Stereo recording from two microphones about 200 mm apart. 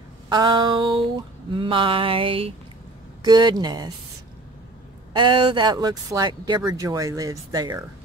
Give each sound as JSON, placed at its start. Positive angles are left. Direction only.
{"t": 0.3, "sound": "speech", "side_deg": -20}
{"t": 5.1, "sound": "speech", "side_deg": -25}